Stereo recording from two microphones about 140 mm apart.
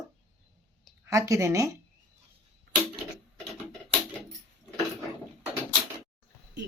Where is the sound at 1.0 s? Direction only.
20° right (ahead or behind).